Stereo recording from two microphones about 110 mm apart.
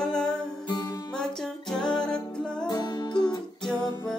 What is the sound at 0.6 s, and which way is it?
Music, 40° left (ahead or behind).